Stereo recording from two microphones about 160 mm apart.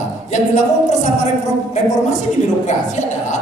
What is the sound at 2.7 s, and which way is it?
Speech, 50° left (ahead or behind).